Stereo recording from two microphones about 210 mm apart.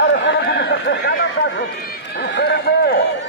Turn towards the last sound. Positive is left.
turn(degrees=50)  # may be behind; listen again after turning